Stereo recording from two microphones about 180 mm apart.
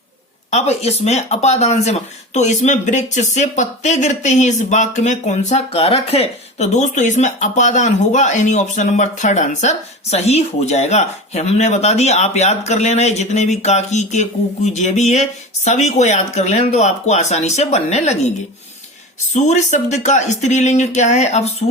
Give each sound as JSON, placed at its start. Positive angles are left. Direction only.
{"t": 0.5, "sound": "speech", "side_deg": 35}
{"t": 19.3, "sound": "speech", "side_deg": 40}